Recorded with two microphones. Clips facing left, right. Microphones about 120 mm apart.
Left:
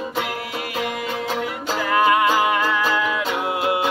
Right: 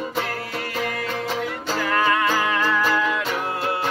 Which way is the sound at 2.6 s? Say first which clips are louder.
Even; centre (ahead or behind).